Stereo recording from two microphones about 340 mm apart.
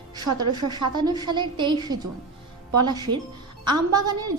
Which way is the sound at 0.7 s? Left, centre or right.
Centre.